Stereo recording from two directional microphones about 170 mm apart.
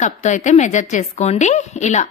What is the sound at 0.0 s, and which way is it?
A woman's voice, 45° left (ahead or behind).